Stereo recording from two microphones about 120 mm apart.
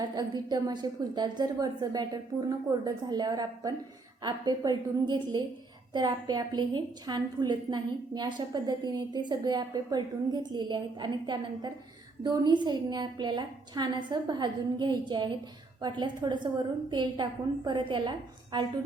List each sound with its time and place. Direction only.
0.0 s a woman's voice: 35° right (ahead or behind)